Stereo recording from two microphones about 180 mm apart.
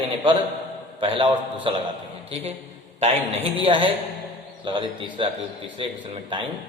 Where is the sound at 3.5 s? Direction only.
30° right (ahead or behind).